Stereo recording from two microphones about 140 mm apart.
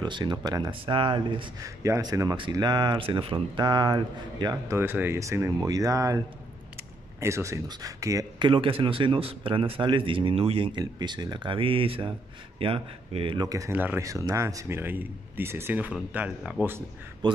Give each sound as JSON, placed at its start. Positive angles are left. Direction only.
{"t": 0.0, "sound": "speech", "side_deg": -30}
{"t": 1.6, "sound": "speech", "side_deg": -25}
{"t": 4.7, "sound": "speech", "side_deg": -15}
{"t": 13.5, "sound": "a man's voice", "side_deg": -20}
{"t": 17.2, "sound": "speech", "side_deg": -30}